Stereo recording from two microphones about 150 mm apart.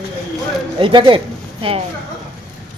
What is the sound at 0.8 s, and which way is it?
Speech, 35° right (ahead or behind).